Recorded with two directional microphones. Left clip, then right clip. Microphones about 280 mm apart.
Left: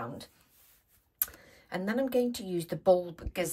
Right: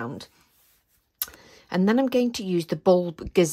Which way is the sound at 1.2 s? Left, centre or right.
Centre.